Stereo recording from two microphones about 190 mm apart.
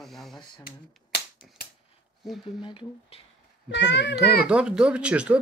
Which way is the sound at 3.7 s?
70° left (ahead or behind).